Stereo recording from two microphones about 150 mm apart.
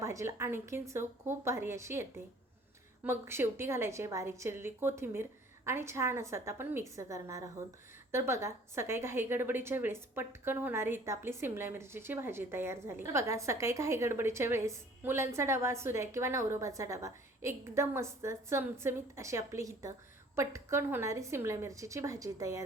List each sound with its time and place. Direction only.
0.0 s a woman's voice: 20° right (ahead or behind)